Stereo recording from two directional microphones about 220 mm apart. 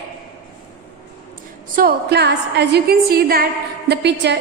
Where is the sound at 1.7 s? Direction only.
45° right (ahead or behind).